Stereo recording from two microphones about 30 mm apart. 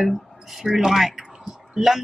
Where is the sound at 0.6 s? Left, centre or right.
Centre.